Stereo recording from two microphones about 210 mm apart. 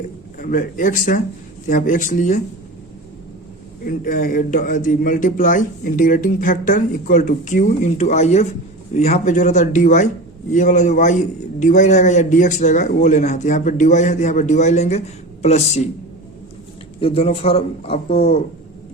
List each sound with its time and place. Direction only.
0.3 s a man's voice: 40° left (ahead or behind)
3.8 s a man's voice: 40° left (ahead or behind)
17.0 s a man's voice: 25° left (ahead or behind)